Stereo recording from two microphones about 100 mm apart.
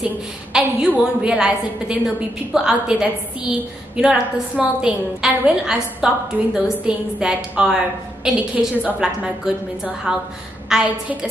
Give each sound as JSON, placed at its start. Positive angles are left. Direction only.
{"t": 0.0, "sound": "a woman's voice", "side_deg": -10}